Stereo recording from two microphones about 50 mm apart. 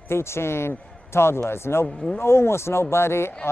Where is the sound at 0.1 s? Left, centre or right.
Left.